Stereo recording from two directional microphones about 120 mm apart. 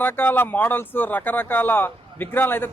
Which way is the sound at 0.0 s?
15° left (ahead or behind).